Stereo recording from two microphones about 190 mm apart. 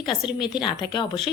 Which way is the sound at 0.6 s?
25° left (ahead or behind).